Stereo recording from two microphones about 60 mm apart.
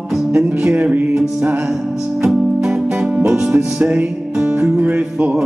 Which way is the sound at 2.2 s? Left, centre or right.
Centre.